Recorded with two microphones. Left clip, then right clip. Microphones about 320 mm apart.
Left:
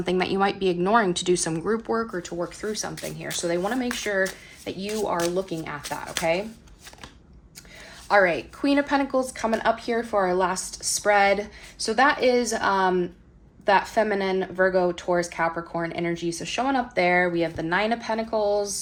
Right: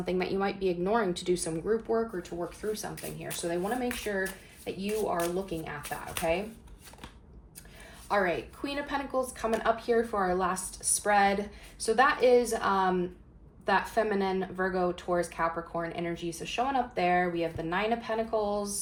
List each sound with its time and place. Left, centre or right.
0.0 s speech: left
8.0 s speech: left